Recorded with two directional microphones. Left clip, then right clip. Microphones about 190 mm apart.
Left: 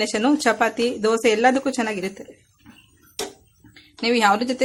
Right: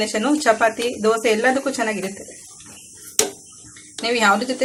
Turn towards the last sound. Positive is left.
turn(degrees=45)  # may be behind; listen again after turning